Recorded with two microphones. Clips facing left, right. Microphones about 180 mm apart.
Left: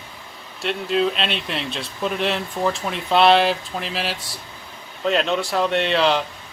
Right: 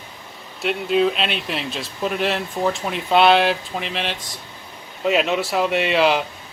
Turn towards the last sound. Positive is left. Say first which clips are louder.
# right 1 dB
turn(degrees=-5)  # may be behind; listen again after turning